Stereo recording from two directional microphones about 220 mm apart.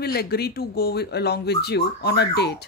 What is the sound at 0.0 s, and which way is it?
Speech, 45° left (ahead or behind).